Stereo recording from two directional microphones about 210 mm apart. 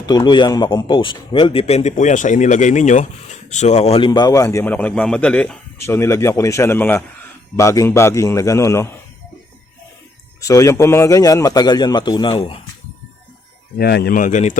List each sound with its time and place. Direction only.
0.0 s a man's voice: 20° left (ahead or behind)
10.4 s a man's voice: 15° left (ahead or behind)
13.7 s speech: 50° left (ahead or behind)